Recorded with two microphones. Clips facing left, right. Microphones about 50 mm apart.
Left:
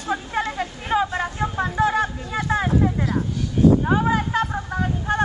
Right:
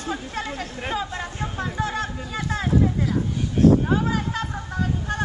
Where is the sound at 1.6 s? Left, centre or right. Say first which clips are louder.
Left 7 dB; centre.